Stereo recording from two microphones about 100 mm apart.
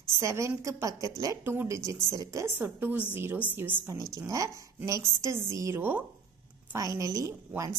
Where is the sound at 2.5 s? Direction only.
20° right (ahead or behind).